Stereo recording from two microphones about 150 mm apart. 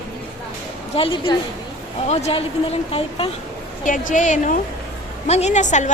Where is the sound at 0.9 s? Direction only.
35° left (ahead or behind).